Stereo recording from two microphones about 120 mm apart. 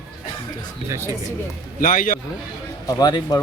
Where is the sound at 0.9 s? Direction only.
25° right (ahead or behind).